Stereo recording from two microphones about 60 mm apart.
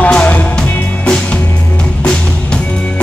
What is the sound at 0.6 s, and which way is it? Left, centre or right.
Music, centre.